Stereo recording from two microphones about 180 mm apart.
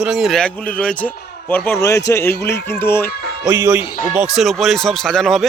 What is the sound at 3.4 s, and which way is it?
Speech, 15° right (ahead or behind).